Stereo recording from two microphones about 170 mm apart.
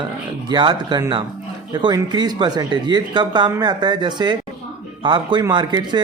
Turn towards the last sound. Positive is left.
turn(degrees=-25)  # may be behind; listen again after turning